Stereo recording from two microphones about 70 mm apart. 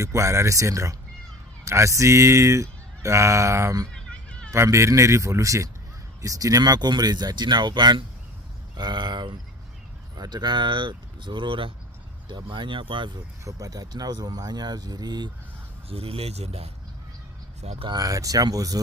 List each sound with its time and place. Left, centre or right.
0.0 s speech: right
3.9 s a sound: centre
4.5 s speech: right
13.4 s speech: right
17.9 s speech: right